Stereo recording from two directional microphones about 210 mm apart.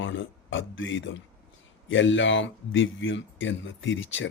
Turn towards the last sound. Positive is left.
turn(degrees=65)  # may be behind; listen again after turning